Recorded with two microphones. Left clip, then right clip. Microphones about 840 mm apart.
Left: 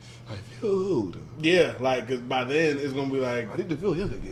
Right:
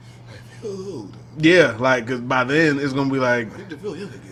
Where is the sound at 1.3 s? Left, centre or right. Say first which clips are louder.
Right 7 dB; right.